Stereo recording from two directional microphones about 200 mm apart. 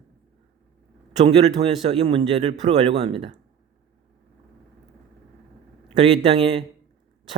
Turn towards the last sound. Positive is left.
turn(degrees=-25)  # may be behind; listen again after turning